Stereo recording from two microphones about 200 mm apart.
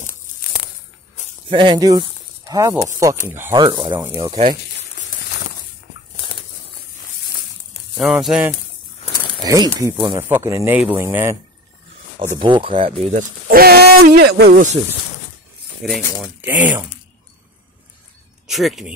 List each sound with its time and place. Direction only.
1.5 s a man's voice: 25° right (ahead or behind)
8.0 s speech: centre (ahead or behind)
9.4 s a man's voice: 20° right (ahead or behind)
12.4 s speech: 25° right (ahead or behind)
13.5 s speech: 50° right (ahead or behind)
15.8 s a man's voice: centre (ahead or behind)
18.5 s speech: centre (ahead or behind)